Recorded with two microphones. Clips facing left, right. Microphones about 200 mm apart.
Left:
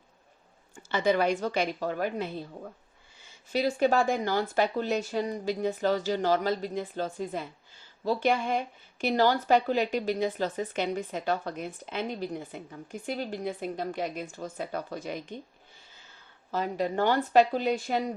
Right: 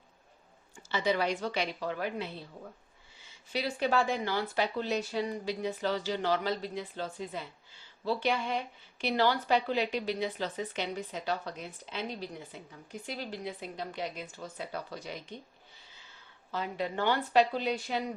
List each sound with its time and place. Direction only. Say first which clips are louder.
0.8 s a woman's voice: left 5 dB; 50° left (ahead or behind)
3.5 s a woman's voice: left 5 dB; 45° left (ahead or behind)
16.5 s a woman's voice: left 5 dB; 45° left (ahead or behind)